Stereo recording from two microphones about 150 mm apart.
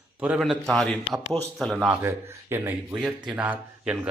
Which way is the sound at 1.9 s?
15° right (ahead or behind).